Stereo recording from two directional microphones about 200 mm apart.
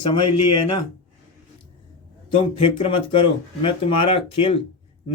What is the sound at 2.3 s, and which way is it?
Speech, 25° left (ahead or behind).